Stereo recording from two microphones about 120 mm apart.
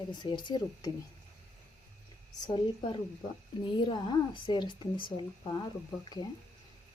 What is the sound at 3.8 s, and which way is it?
Speech, 40° left (ahead or behind).